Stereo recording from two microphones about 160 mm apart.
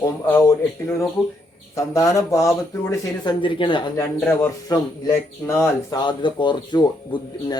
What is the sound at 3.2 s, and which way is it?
Speech, 30° left (ahead or behind).